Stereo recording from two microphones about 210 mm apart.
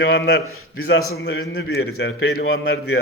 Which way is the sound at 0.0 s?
55° left (ahead or behind).